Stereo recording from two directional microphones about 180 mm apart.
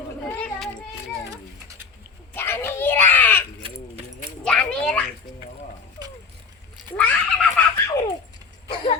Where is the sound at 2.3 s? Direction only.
10° left (ahead or behind).